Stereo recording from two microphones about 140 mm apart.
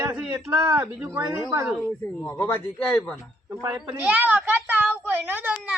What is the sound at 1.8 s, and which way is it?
Speech, 15° left (ahead or behind).